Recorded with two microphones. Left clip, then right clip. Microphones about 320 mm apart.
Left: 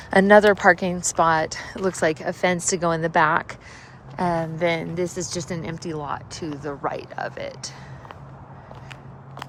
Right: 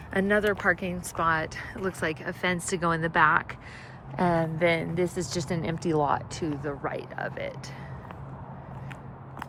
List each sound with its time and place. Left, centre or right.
0.1 s speech: centre